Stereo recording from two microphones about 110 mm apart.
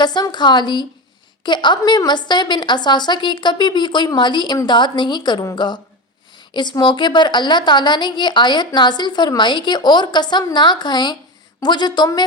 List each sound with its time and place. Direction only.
0.0 s a woman's voice: 40° left (ahead or behind)